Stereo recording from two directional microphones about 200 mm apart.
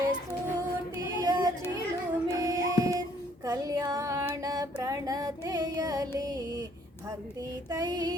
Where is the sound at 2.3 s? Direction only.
20° right (ahead or behind).